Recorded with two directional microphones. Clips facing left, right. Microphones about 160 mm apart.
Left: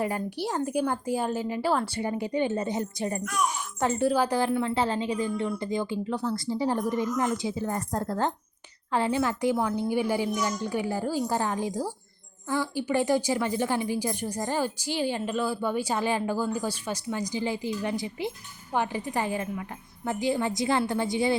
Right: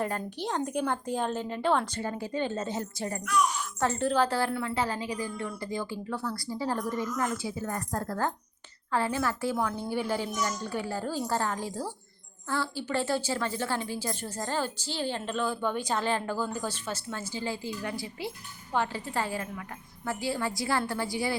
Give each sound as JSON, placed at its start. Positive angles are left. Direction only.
{"t": 0.0, "sound": "speech", "side_deg": 10}